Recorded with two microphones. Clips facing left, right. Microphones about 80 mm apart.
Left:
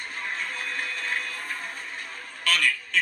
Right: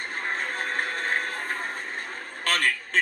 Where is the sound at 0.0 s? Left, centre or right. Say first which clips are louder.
Right 3 dB; right.